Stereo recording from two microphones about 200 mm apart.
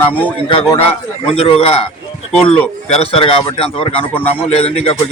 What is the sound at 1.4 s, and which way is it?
Speech, 30° left (ahead or behind).